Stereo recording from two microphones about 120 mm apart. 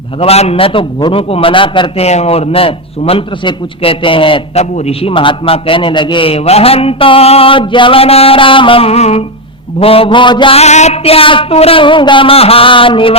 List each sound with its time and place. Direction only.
0.2 s a man's voice: 60° left (ahead or behind)
2.0 s a man's voice: 65° left (ahead or behind); by 4.4 s 45° left (ahead or behind)
4.5 s a man's voice: 60° left (ahead or behind); by 10.6 s 40° left (ahead or behind)
10.6 s a man's voice: 70° left (ahead or behind); by 13.1 s 45° left (ahead or behind)